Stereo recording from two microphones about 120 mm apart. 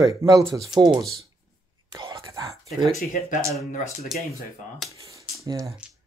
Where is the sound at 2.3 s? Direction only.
25° right (ahead or behind).